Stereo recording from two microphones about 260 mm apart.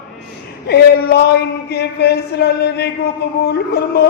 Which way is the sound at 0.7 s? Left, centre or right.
Left.